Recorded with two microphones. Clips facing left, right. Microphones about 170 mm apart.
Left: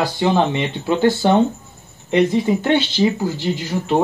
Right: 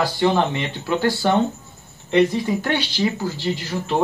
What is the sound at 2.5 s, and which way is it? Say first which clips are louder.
Speech: left 4 dB; 20° left (ahead or behind).